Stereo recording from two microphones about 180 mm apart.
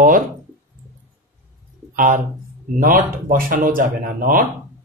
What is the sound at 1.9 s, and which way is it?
Speech, 45° right (ahead or behind).